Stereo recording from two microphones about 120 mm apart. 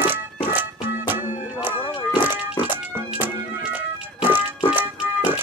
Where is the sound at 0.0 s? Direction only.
15° right (ahead or behind).